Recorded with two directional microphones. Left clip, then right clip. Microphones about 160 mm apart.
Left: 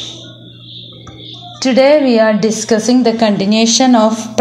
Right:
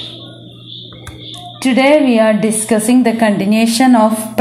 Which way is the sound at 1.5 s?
30° left (ahead or behind).